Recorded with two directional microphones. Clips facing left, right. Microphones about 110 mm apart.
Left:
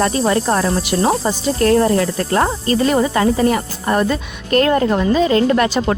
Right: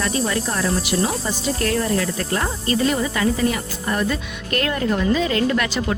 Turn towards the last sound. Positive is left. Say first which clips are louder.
# left 6 dB
turn(degrees=40)  # may be behind; listen again after turning